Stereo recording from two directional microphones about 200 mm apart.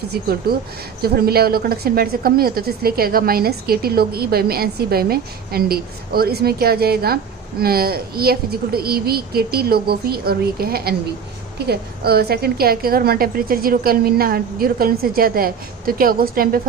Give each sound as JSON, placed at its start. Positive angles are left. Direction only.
{"t": 0.1, "sound": "speech", "side_deg": -50}